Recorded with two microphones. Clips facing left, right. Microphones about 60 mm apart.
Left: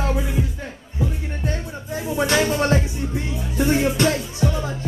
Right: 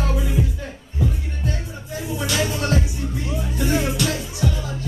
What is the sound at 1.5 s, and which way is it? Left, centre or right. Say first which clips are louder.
Music: left 2 dB; left.